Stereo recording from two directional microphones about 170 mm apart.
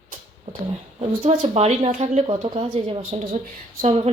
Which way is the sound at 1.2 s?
35° right (ahead or behind).